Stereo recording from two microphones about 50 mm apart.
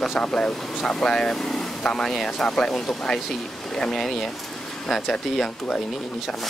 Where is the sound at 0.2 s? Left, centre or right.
Centre.